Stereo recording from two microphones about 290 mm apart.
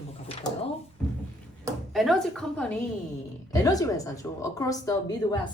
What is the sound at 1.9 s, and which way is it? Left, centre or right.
A woman's voice, centre.